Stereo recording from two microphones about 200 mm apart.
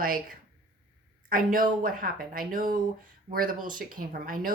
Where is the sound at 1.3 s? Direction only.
45° right (ahead or behind).